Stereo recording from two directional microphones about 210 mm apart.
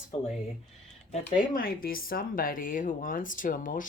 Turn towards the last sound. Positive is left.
turn(degrees=40)  # may be behind; listen again after turning